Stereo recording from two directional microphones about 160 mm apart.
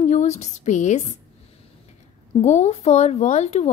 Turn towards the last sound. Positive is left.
turn(degrees=45)  # may be behind; listen again after turning